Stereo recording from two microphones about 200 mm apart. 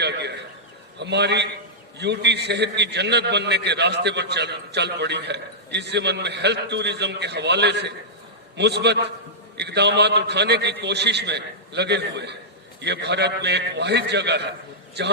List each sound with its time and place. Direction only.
0.0 s a man's voice: 60° right (ahead or behind)